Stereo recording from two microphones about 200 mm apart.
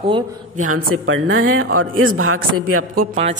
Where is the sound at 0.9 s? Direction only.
85° right.